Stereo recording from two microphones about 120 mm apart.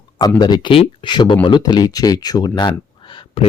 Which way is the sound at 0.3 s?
35° left (ahead or behind).